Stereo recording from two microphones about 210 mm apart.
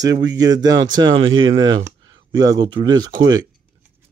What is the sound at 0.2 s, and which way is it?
Speech, 20° right (ahead or behind).